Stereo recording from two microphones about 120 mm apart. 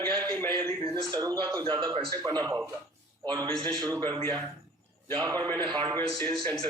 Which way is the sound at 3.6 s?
30° right (ahead or behind).